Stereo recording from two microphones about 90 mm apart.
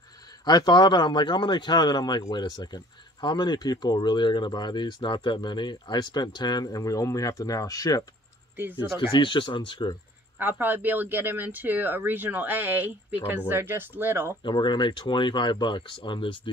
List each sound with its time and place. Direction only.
0.5 s speech: 50° left (ahead or behind)
9.1 s speech: 65° left (ahead or behind)
10.4 s speech: 20° right (ahead or behind)
14.4 s speech: 60° left (ahead or behind)